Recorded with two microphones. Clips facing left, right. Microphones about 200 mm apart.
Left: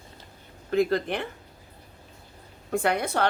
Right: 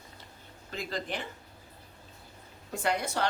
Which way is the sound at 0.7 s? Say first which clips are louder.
Left 12 dB; 60° left (ahead or behind).